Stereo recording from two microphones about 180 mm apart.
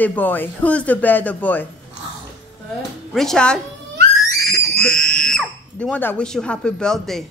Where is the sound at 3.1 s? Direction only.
5° left (ahead or behind).